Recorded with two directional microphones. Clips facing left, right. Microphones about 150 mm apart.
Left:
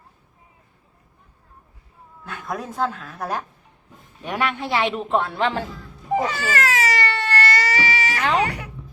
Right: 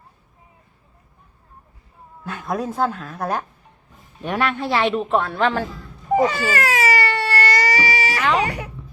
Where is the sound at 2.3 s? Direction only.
25° right (ahead or behind).